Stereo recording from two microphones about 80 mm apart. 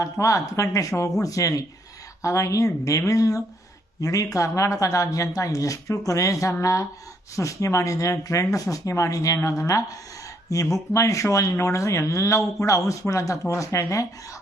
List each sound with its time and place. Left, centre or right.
0.0 s speech: left